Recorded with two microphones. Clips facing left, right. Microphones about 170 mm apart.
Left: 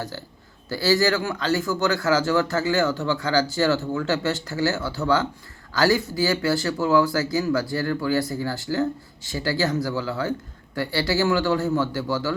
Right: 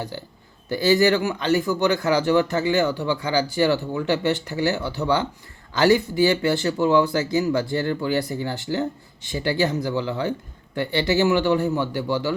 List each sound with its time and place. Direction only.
0.1 s speech: 15° right (ahead or behind)